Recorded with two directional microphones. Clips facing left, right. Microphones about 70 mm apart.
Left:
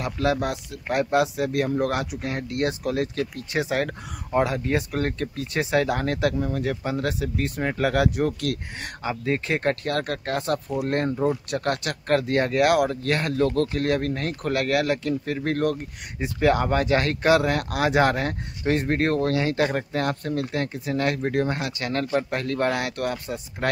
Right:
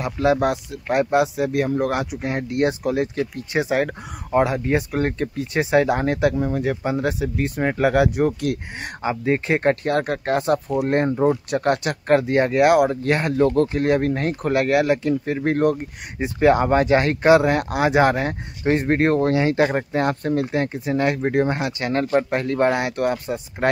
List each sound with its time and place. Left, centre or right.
0.0 s speech: centre